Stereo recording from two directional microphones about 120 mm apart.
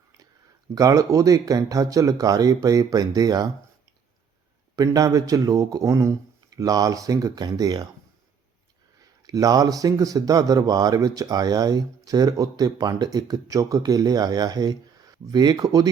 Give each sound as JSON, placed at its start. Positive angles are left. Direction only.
{"t": 0.7, "sound": "speech", "side_deg": -30}
{"t": 4.8, "sound": "speech", "side_deg": -30}
{"t": 9.2, "sound": "speech", "side_deg": -30}